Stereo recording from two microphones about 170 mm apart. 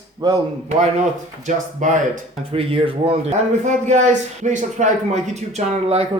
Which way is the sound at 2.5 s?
35° right (ahead or behind).